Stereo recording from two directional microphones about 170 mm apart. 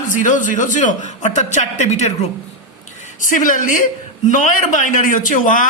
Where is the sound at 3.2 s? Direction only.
50° left (ahead or behind).